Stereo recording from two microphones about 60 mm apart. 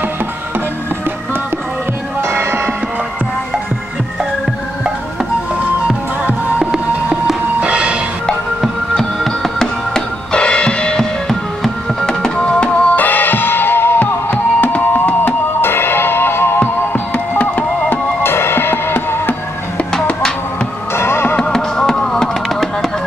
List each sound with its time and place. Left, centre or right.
2.2 s church bell: right
6.7 s music: centre
7.6 s a sound: centre
8.5 s music: centre
12.9 s music: left
14.3 s music: left
18.3 s music: left
20.9 s music: left
21.4 s music: centre